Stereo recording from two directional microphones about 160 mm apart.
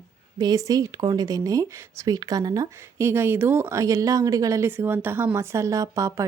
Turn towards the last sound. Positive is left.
turn(degrees=-20)  # may be behind; listen again after turning